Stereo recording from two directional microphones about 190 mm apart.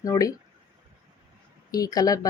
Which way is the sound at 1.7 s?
20° left (ahead or behind).